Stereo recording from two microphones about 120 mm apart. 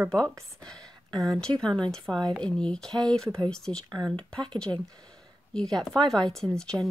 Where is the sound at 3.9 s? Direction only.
35° right (ahead or behind).